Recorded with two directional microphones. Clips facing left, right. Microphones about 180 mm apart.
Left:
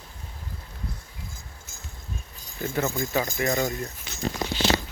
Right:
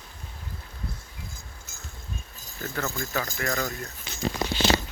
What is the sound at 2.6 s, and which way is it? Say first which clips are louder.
Speech: left 5 dB; 15° left (ahead or behind).